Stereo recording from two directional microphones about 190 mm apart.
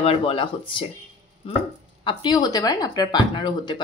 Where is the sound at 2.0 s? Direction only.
20° left (ahead or behind).